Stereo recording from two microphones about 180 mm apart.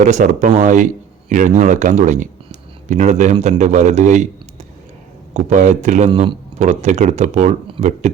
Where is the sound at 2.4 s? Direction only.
40° right (ahead or behind).